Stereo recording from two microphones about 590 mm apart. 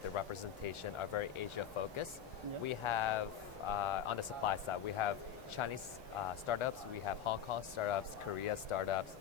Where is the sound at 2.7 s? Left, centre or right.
Left.